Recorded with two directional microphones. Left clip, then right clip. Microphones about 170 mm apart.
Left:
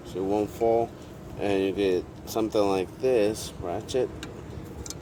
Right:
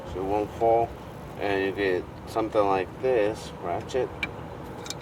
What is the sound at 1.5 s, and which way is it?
Speech, 65° left (ahead or behind).